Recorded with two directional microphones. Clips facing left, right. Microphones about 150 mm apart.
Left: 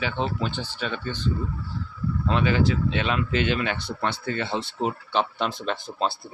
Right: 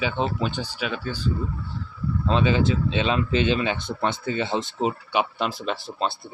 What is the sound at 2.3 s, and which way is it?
Speech, 20° right (ahead or behind).